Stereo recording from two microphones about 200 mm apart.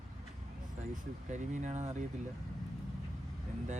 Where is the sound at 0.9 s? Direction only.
35° right (ahead or behind).